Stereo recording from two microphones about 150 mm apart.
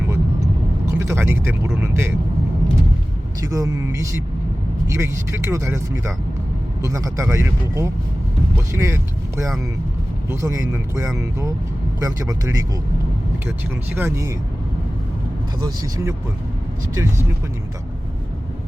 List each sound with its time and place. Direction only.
0.9 s speech: 15° right (ahead or behind)
3.4 s speech: 25° right (ahead or behind)
10.2 s speech: 20° right (ahead or behind)
13.9 s speech: 15° right (ahead or behind)
15.6 s speech: 20° right (ahead or behind)